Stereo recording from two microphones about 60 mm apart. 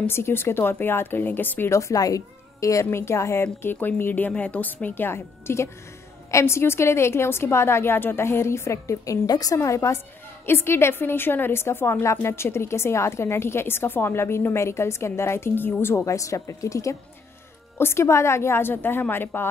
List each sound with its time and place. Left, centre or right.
0.0 s speech: left
1.7 s speech: left
2.9 s a woman's voice: left
3.6 s speech: left
4.8 s a woman's voice: left
10.4 s a woman's voice: left
16.1 s a woman's voice: left
17.7 s speech: left